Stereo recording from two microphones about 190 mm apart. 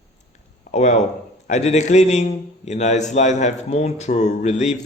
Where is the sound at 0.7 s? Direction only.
35° left (ahead or behind).